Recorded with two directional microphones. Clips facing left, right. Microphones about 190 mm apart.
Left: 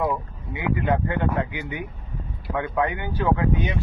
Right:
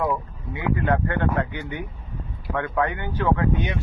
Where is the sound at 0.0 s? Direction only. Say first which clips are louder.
Even; 15° left (ahead or behind).